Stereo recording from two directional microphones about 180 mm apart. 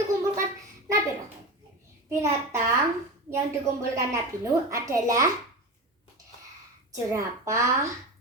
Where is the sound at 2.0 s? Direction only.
15° right (ahead or behind).